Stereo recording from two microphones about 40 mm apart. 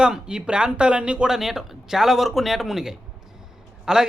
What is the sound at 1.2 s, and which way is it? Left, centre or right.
A man's voice, centre.